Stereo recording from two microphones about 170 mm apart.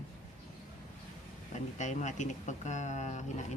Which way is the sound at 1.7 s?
45° left (ahead or behind).